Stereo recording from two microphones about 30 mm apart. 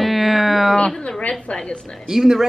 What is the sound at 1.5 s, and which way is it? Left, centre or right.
Speech, left.